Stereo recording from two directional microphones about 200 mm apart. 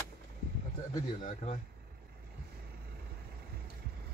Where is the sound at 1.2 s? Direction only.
35° left (ahead or behind).